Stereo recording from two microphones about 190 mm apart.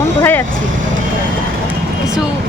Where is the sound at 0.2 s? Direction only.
10° left (ahead or behind).